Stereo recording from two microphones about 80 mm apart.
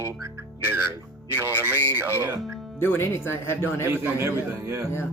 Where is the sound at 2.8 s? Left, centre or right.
Left.